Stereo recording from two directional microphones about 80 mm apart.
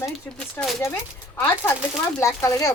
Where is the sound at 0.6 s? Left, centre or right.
Left.